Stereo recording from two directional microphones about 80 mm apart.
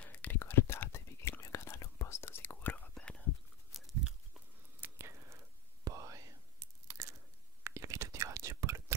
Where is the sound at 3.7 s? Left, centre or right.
Centre.